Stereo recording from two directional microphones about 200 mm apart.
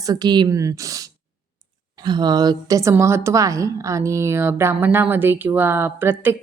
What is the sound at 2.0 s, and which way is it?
A woman's voice, 20° right (ahead or behind).